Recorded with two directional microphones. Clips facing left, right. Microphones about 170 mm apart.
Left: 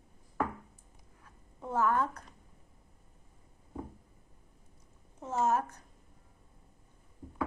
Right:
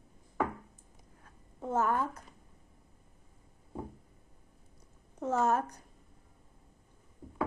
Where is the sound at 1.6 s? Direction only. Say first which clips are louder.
Right 2 dB; 45° right (ahead or behind).